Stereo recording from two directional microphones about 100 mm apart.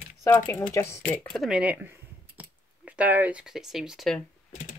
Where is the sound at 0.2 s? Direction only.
25° left (ahead or behind).